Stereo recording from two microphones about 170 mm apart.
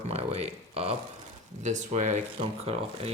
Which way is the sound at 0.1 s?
40° right (ahead or behind).